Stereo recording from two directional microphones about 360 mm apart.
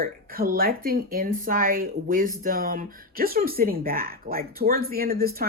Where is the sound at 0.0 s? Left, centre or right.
Right.